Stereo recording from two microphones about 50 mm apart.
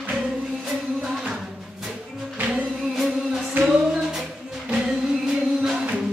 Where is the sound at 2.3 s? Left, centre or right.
Right.